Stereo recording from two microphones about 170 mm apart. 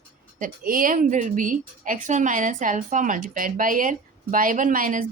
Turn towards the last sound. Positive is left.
turn(degrees=-55)  # may be behind; listen again after turning